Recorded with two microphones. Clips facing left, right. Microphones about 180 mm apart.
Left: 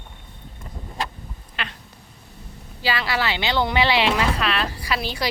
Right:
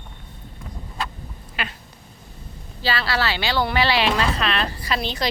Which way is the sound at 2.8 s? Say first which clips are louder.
Even; 15° left (ahead or behind).